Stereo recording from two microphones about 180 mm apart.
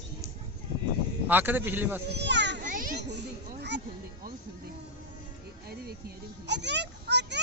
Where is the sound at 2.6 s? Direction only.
50° right (ahead or behind).